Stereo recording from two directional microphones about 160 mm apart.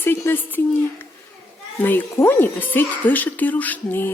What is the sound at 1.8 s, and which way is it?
Speech, 10° left (ahead or behind).